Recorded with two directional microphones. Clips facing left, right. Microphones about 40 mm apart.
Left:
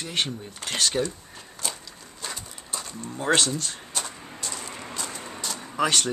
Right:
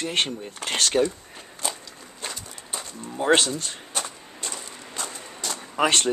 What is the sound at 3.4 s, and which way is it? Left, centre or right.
Speech, right.